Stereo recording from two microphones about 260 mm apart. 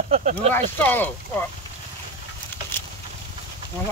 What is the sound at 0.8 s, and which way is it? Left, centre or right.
Speech, centre.